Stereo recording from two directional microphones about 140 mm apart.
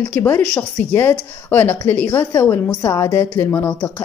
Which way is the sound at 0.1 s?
15° left (ahead or behind).